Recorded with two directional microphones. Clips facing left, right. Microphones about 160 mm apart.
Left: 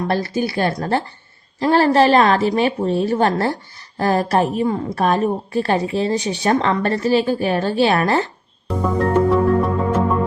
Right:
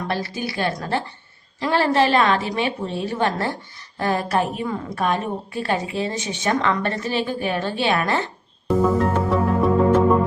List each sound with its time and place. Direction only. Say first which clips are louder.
0.1 s a woman's voice: left 6 dB; 45° left (ahead or behind)
9.0 s music: left 4 dB; centre (ahead or behind)